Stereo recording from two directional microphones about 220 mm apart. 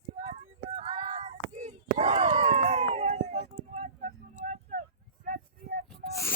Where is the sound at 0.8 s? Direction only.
30° right (ahead or behind).